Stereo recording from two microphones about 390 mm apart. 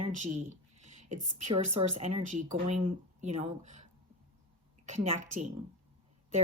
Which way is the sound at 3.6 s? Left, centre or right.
Right.